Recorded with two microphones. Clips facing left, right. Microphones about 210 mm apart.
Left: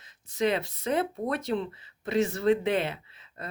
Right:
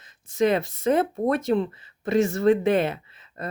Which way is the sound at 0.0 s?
45° right (ahead or behind).